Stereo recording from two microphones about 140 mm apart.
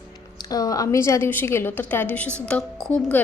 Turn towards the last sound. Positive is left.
turn(degrees=5)  # may be behind; listen again after turning